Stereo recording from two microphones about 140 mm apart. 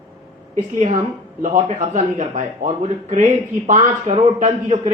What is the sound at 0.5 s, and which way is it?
Speech, 55° right (ahead or behind).